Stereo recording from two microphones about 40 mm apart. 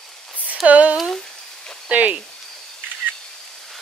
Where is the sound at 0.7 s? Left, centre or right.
Right.